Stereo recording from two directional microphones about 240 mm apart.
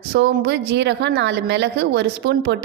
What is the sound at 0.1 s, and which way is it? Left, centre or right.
A woman's voice, right.